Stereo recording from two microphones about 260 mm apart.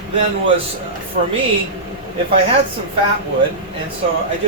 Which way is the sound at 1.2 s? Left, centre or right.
Right.